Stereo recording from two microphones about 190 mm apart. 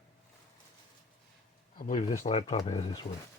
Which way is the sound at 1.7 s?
45° left (ahead or behind).